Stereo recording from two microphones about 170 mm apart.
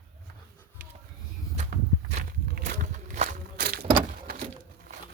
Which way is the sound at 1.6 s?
45° right (ahead or behind).